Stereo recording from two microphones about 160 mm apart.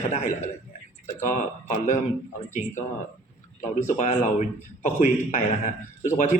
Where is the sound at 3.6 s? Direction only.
50° left (ahead or behind).